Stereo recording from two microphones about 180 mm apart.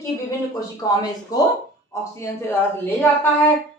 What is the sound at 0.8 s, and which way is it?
Speech, 20° left (ahead or behind).